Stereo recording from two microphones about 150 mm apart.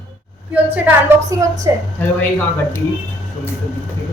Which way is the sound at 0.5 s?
10° right (ahead or behind).